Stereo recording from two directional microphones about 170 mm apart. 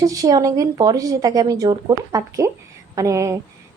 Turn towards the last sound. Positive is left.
turn(degrees=-20)  # may be behind; listen again after turning